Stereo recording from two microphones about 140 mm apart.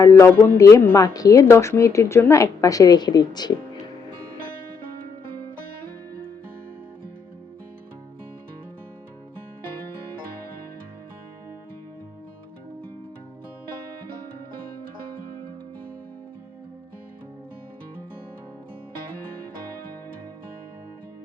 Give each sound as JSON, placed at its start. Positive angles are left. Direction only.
{"t": 0.0, "sound": "a woman's voice", "side_deg": 20}